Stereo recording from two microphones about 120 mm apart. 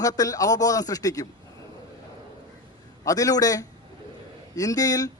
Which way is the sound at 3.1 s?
30° left (ahead or behind).